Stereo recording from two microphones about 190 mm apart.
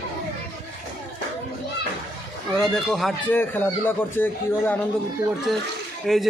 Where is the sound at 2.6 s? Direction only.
Centre (ahead or behind).